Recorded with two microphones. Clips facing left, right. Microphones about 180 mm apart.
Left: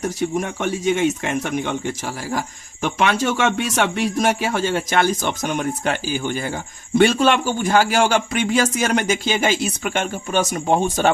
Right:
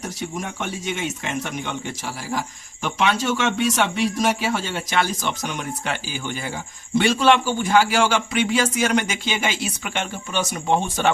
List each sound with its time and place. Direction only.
0.2 s a man's voice: 50° left (ahead or behind)
2.8 s a man's voice: 55° left (ahead or behind)